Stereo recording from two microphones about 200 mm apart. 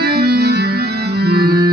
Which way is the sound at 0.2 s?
55° right (ahead or behind).